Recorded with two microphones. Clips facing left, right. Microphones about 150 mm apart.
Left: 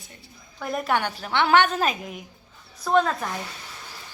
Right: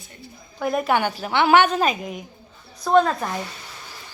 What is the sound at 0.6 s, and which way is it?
A woman's voice, 5° right (ahead or behind).